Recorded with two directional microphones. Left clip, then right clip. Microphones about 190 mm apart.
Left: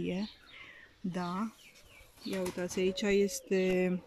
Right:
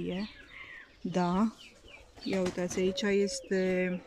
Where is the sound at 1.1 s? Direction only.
15° right (ahead or behind).